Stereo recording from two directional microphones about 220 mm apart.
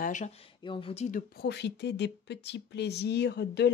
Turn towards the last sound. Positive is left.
turn(degrees=50)  # may be behind; listen again after turning